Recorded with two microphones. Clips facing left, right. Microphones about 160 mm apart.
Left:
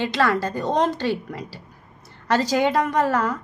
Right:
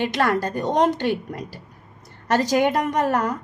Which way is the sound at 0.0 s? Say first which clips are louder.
Even; 15° right (ahead or behind).